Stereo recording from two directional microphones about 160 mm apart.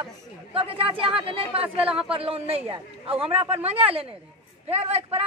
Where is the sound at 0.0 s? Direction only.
35° right (ahead or behind).